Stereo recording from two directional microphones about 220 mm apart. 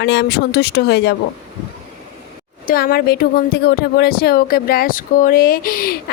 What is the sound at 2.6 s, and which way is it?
A woman's voice, 45° left (ahead or behind).